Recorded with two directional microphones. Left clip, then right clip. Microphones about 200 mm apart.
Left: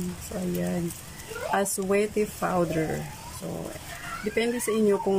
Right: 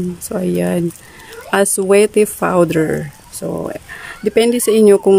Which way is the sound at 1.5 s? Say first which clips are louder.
Right 14 dB; 50° right (ahead or behind).